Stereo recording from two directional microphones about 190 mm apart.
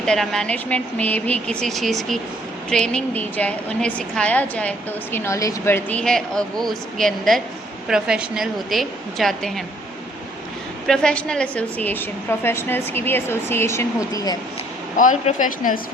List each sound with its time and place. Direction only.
0.0 s a woman's voice: centre (ahead or behind)
10.8 s a woman's voice: 5° left (ahead or behind)
14.9 s speech: 45° left (ahead or behind)